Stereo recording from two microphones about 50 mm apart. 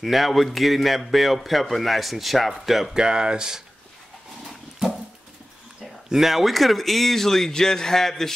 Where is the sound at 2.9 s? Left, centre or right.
Centre.